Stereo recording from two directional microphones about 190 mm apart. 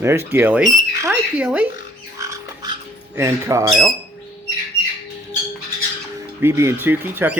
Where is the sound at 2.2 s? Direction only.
15° right (ahead or behind).